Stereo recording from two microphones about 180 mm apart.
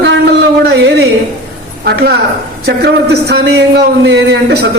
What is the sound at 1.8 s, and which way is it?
Speech, 60° right (ahead or behind).